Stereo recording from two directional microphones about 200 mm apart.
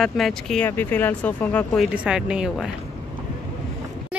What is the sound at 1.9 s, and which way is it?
Speech, 5° right (ahead or behind).